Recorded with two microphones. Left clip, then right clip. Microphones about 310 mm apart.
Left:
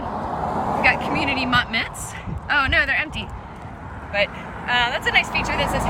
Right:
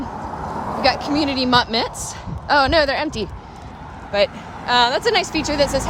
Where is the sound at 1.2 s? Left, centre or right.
Centre.